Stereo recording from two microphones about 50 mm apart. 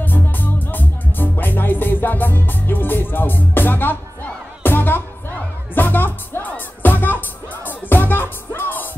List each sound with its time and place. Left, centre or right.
0.0 s music: left